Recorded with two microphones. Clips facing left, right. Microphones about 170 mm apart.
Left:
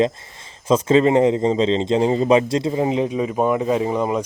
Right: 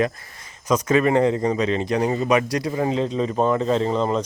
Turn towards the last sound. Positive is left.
turn(degrees=10)  # may be behind; listen again after turning